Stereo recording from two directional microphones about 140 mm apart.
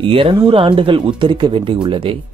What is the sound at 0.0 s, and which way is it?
Speech, 40° right (ahead or behind).